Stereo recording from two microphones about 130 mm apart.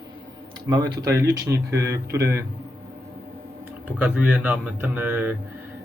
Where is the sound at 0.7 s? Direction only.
25° right (ahead or behind).